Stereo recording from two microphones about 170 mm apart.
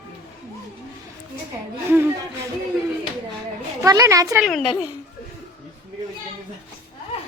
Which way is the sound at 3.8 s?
20° right (ahead or behind).